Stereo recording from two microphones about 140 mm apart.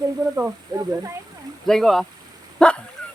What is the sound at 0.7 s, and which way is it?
Speech, 30° right (ahead or behind).